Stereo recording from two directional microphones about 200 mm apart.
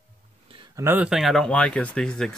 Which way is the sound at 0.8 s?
10° right (ahead or behind).